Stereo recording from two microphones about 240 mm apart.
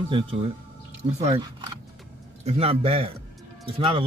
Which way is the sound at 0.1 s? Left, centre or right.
Right.